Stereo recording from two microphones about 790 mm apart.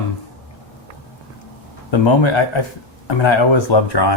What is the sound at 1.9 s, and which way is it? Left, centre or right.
Speech, left.